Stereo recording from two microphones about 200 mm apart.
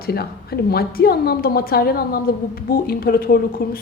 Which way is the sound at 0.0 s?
50° left (ahead or behind).